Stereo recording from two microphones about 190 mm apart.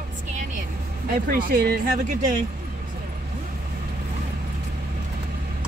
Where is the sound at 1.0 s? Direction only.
50° right (ahead or behind).